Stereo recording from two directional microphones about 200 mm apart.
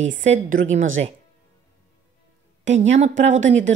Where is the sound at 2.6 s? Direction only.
35° right (ahead or behind).